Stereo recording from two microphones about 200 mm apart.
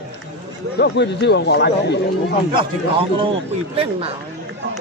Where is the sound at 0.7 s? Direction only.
55° left (ahead or behind).